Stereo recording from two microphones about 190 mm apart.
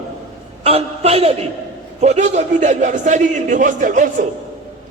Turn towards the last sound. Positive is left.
turn(degrees=-40)  # may be behind; listen again after turning